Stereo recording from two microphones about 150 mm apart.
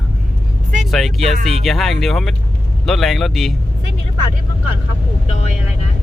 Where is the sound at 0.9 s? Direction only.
Centre (ahead or behind).